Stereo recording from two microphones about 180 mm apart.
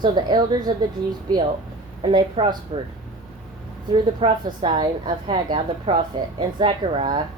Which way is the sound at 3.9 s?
25° right (ahead or behind).